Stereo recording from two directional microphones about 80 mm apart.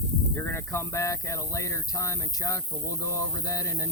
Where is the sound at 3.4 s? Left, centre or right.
Left.